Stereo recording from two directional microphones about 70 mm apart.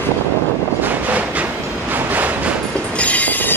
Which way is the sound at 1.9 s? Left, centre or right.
Right.